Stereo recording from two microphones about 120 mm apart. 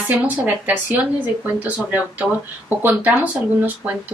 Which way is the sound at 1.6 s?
15° right (ahead or behind).